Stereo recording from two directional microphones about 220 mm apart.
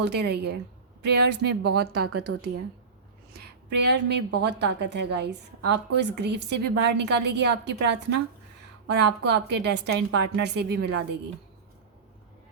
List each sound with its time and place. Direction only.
0.0 s a woman's voice: 50° right (ahead or behind)
2.3 s speech: 65° right (ahead or behind)
3.3 s a woman's voice: 45° right (ahead or behind)
8.9 s a woman's voice: 50° right (ahead or behind)